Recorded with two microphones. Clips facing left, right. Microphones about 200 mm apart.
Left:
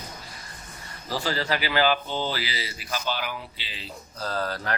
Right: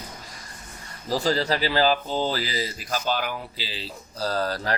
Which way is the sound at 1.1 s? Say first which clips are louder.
Right 4 dB; 35° right (ahead or behind).